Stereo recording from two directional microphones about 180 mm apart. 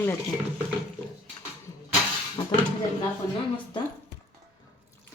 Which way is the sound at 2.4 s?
20° left (ahead or behind).